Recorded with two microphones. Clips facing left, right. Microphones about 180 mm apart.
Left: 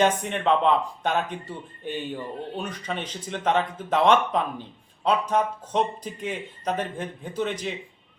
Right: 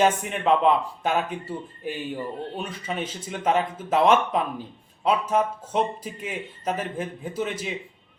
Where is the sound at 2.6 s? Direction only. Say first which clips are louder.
Even; 5° right (ahead or behind).